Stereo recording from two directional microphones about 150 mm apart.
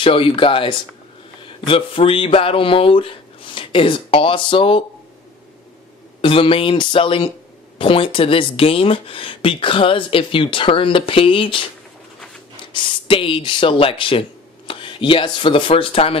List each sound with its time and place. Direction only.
0.0 s speech: 35° left (ahead or behind)
6.2 s speech: 35° left (ahead or behind)
12.7 s speech: 35° left (ahead or behind)